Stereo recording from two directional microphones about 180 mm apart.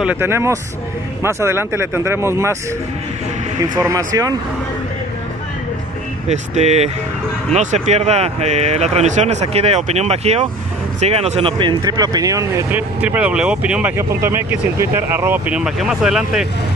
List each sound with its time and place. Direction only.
0.0 s speech: 10° right (ahead or behind)
3.7 s speech: 20° right (ahead or behind)
6.2 s speech: 40° right (ahead or behind); by 16.4 s 5° right (ahead or behind)